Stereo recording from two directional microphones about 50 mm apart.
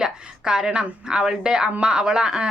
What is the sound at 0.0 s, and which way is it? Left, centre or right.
A woman's voice, centre.